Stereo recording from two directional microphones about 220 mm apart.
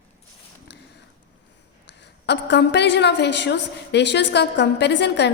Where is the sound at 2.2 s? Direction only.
50° left (ahead or behind).